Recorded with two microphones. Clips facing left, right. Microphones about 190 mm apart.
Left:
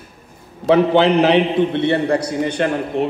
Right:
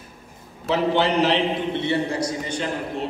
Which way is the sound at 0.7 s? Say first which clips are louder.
Left 7 dB; 60° left (ahead or behind).